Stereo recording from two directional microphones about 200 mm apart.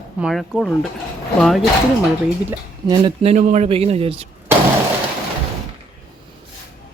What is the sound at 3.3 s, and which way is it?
Speech, 35° right (ahead or behind).